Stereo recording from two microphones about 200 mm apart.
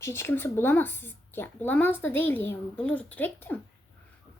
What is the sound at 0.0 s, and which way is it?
Speech, 15° left (ahead or behind).